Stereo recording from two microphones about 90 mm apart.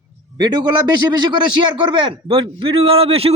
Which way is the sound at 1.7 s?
70° right (ahead or behind).